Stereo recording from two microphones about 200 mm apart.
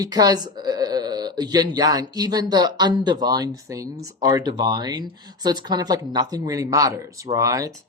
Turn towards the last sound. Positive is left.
turn(degrees=-15)  # may be behind; listen again after turning